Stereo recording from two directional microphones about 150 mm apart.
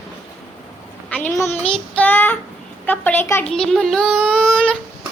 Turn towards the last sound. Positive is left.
turn(degrees=5)  # may be behind; listen again after turning